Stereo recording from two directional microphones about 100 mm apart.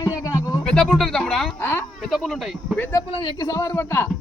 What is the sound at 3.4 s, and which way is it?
Speech, 40° left (ahead or behind).